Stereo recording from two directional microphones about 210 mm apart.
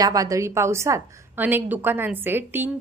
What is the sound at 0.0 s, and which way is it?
A woman's voice, 15° right (ahead or behind).